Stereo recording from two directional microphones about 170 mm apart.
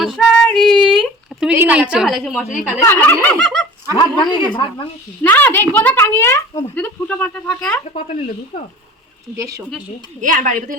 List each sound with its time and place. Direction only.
0.0 s female singing: centre (ahead or behind)
0.9 s a sound: centre (ahead or behind)
1.5 s a woman's voice: 10° right (ahead or behind)
2.7 s a woman's voice: 15° left (ahead or behind)
3.9 s speech: 25° left (ahead or behind)
5.2 s a woman's voice: 10° left (ahead or behind)
7.9 s speech: 45° left (ahead or behind)
9.3 s speech: 20° right (ahead or behind)
10.2 s a woman's voice: 50° right (ahead or behind)